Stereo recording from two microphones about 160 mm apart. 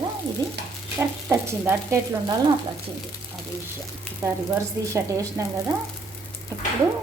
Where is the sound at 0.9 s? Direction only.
15° right (ahead or behind).